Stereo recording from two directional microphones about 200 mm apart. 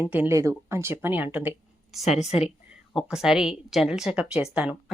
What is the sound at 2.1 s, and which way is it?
Speech, 35° left (ahead or behind).